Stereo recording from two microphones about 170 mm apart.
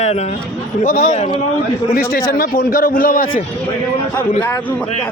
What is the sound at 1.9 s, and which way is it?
A man's voice, 60° left (ahead or behind).